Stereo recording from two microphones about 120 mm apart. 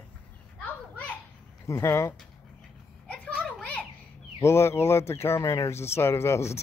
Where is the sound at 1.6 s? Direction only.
25° left (ahead or behind).